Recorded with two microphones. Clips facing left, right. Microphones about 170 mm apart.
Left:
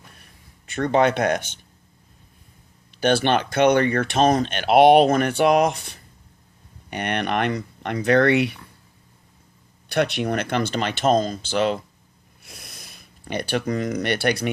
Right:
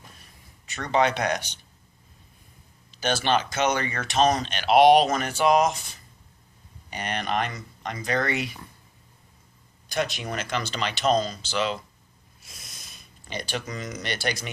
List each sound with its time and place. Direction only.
0.2 s a sound: 55° left (ahead or behind)
2.9 s speech: 60° left (ahead or behind)
9.9 s speech: 65° left (ahead or behind)